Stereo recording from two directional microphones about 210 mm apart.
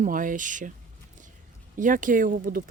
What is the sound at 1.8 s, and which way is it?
Speech, 40° right (ahead or behind).